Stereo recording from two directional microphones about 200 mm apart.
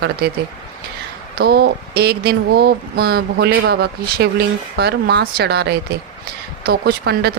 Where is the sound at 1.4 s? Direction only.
55° right (ahead or behind).